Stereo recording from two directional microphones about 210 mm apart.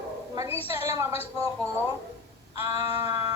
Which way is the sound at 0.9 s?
15° right (ahead or behind).